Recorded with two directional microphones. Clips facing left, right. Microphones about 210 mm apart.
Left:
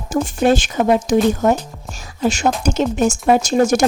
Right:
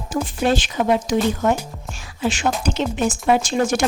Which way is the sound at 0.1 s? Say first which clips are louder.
Left 5 dB; 45° left (ahead or behind).